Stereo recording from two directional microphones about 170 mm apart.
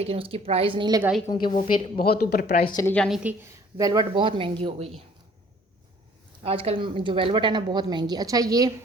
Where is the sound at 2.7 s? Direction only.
20° left (ahead or behind).